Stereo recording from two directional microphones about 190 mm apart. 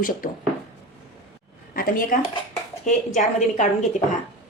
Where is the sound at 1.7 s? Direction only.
50° left (ahead or behind).